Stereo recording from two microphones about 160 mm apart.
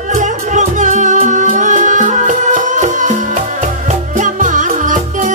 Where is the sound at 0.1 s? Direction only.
50° right (ahead or behind).